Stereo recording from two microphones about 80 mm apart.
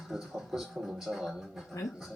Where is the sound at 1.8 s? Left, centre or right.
Left.